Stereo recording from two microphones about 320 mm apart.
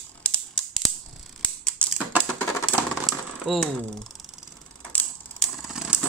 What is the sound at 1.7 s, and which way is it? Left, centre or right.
Typewriter, centre.